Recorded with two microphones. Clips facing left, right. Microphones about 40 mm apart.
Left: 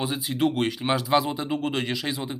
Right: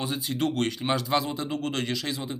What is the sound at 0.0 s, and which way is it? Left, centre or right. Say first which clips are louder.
Speech: left 3 dB; centre.